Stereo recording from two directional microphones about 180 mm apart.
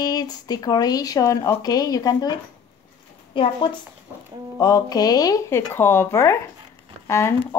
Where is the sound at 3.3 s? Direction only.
25° left (ahead or behind).